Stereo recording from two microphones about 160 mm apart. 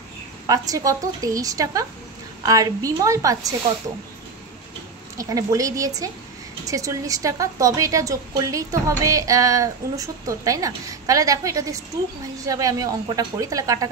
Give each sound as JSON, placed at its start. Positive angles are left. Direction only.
{"t": 0.5, "sound": "a woman's voice", "side_deg": -20}
{"t": 5.1, "sound": "a woman's voice", "side_deg": -20}